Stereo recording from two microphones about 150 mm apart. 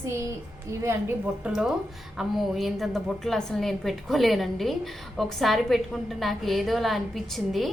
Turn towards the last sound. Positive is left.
turn(degrees=0)  # may be behind; listen again after turning